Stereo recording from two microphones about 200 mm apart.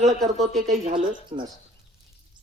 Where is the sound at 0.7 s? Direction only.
25° right (ahead or behind).